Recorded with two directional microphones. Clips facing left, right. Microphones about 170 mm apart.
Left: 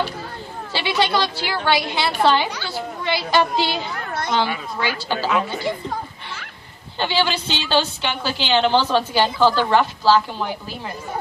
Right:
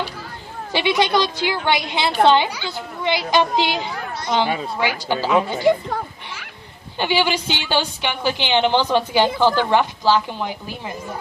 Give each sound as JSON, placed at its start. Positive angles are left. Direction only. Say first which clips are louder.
{"t": 0.7, "sound": "a woman's voice", "louder": "right 3 dB", "side_deg": -20}
{"t": 7.0, "sound": "a woman's voice", "louder": "right 2 dB", "side_deg": -15}